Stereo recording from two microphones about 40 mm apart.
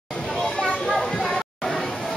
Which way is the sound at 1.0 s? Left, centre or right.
Centre.